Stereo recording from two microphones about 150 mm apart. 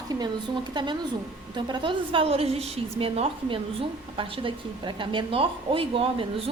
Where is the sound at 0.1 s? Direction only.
30° right (ahead or behind).